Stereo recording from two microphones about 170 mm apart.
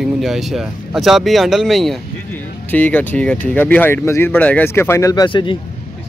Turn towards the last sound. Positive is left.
turn(degrees=30)  # may be behind; listen again after turning